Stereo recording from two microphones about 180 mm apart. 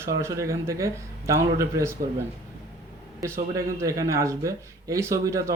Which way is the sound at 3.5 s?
15° right (ahead or behind).